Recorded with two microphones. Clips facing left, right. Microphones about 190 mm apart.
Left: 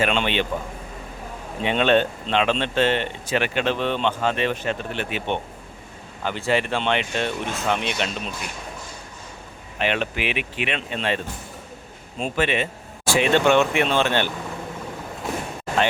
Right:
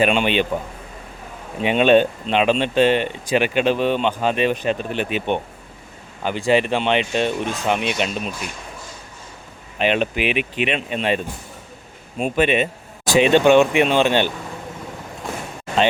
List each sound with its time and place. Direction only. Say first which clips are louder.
0.0 s speech: right 4 dB; 15° right (ahead or behind)
1.6 s speech: right 5 dB; 15° right (ahead or behind)
9.7 s speech: right 5 dB; 20° right (ahead or behind)